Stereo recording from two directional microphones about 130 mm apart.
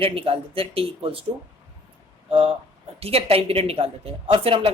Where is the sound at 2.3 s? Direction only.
45° right (ahead or behind).